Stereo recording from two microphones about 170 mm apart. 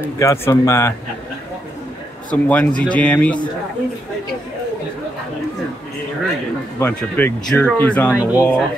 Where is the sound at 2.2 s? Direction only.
10° left (ahead or behind).